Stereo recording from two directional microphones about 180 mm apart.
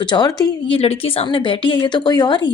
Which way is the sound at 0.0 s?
25° left (ahead or behind).